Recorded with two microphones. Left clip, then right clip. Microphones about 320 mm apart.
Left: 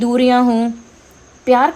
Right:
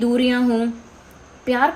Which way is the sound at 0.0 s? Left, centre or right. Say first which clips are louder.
Left 6 dB; left.